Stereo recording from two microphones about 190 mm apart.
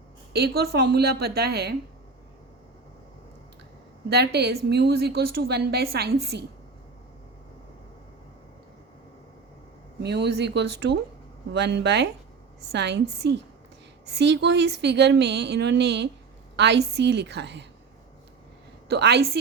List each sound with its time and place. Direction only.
0.3 s a woman's voice: 55° right (ahead or behind)
4.1 s a woman's voice: 60° right (ahead or behind)
10.0 s a woman's voice: 60° right (ahead or behind)
18.9 s a woman's voice: 60° right (ahead or behind)